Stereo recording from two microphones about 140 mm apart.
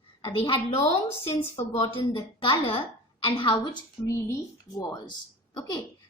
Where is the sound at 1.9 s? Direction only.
40° left (ahead or behind).